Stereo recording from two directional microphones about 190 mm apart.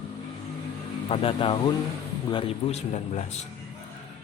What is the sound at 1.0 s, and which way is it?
Speech, 30° left (ahead or behind).